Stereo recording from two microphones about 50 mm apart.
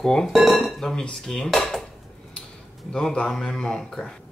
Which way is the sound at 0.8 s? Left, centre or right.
Centre.